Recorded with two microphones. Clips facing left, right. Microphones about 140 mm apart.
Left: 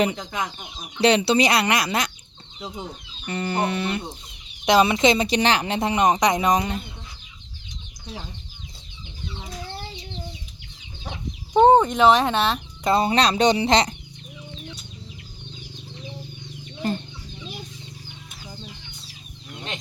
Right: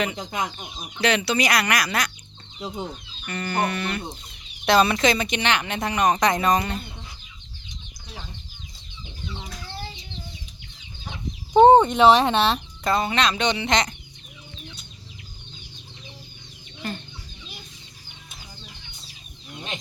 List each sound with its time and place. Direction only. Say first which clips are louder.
0.2 s speech: right 1 dB; 15° right (ahead or behind)
1.0 s speech: left 4 dB; 30° left (ahead or behind)
2.6 s speech: right 2 dB; 10° right (ahead or behind)
3.2 s speech: left 1 dB; 25° left (ahead or behind)
11.5 s speech: right 2 dB; centre (ahead or behind)
12.8 s speech: left 3 dB; 30° left (ahead or behind)
16.8 s chicken: left 6 dB; 40° left (ahead or behind)